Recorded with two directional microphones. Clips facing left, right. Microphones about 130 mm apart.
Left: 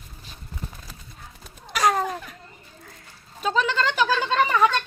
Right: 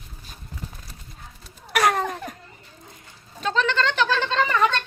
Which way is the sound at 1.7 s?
60° right (ahead or behind).